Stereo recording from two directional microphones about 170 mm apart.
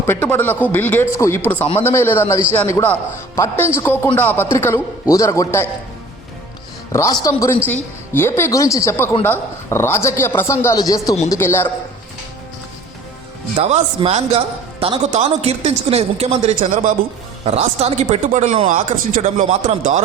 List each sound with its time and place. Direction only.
0.0 s speech: 15° left (ahead or behind)
6.9 s speech: 20° left (ahead or behind)
13.6 s a man's voice: 40° right (ahead or behind)